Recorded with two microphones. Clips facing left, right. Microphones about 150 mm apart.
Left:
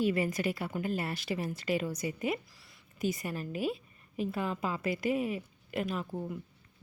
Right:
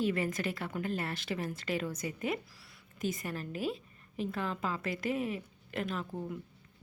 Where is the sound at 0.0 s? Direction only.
10° left (ahead or behind).